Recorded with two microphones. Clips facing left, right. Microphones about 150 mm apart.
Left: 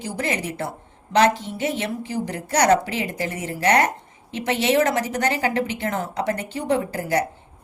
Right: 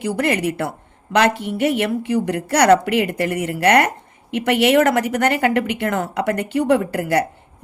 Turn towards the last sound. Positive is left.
turn(degrees=-65)  # may be behind; listen again after turning